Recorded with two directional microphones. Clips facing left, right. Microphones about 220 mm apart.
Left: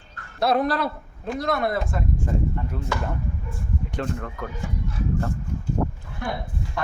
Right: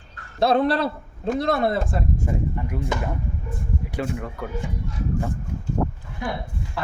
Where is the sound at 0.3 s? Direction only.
30° right (ahead or behind).